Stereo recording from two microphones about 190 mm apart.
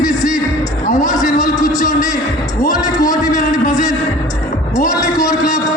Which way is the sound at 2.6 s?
20° left (ahead or behind).